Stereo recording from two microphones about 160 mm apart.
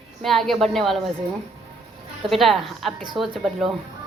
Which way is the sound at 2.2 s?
Centre (ahead or behind).